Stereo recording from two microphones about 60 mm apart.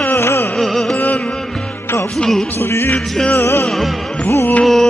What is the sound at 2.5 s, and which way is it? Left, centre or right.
Music, left.